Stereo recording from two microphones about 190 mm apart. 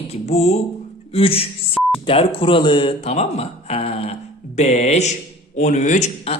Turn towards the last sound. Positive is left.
turn(degrees=35)  # may be behind; listen again after turning